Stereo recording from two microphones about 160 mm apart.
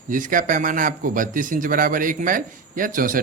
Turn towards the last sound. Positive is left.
turn(degrees=-60)  # may be behind; listen again after turning